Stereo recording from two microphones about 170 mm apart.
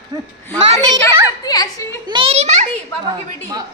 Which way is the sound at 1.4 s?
20° left (ahead or behind).